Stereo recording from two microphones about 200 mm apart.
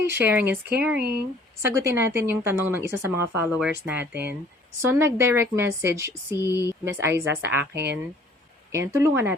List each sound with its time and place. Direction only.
0.1 s a woman's voice: 10° right (ahead or behind)
6.5 s speech: 15° left (ahead or behind)
6.8 s a woman's voice: 10° right (ahead or behind)
8.9 s a woman's voice: 15° right (ahead or behind)